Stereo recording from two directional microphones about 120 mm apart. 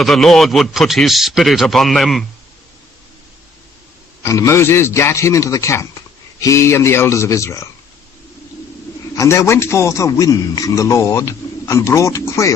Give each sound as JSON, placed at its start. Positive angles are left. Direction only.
{"t": 0.0, "sound": "speech", "side_deg": 0}
{"t": 4.2, "sound": "a man's voice", "side_deg": 25}
{"t": 9.1, "sound": "a man's voice", "side_deg": 25}